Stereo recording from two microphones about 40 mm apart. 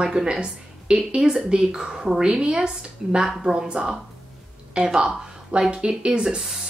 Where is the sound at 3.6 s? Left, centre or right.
Right.